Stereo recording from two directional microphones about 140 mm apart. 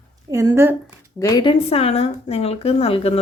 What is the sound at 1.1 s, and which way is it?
Speech, 25° left (ahead or behind).